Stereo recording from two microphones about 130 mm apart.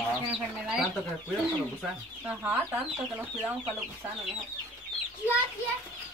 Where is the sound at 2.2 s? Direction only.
15° right (ahead or behind).